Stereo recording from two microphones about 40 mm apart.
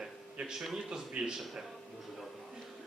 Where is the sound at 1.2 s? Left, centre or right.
Centre.